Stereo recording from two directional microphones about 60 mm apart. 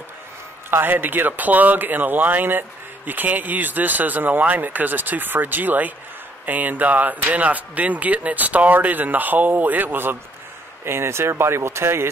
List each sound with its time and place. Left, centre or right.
0.7 s speech: right
10.9 s speech: right